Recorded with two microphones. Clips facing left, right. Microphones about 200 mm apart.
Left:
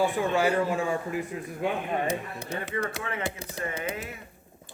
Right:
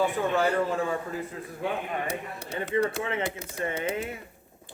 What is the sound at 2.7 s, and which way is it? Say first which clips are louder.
Speech: right 7 dB; 25° right (ahead or behind).